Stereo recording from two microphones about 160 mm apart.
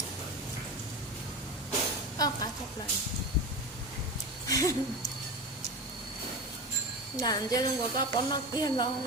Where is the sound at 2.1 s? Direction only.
25° left (ahead or behind).